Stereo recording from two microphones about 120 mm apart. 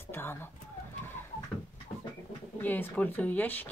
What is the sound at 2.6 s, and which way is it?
Speech, 15° left (ahead or behind).